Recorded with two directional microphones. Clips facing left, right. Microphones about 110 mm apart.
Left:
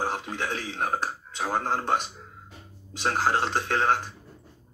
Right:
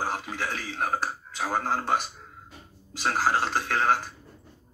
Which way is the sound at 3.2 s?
20° left (ahead or behind).